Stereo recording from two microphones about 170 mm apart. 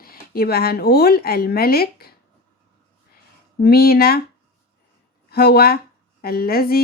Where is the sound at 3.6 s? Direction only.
65° left (ahead or behind).